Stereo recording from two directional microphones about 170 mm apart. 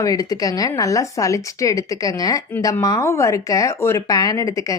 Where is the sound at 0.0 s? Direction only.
20° left (ahead or behind).